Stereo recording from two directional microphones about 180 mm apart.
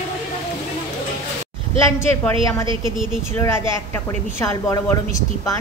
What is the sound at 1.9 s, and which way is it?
A woman's voice, 15° left (ahead or behind).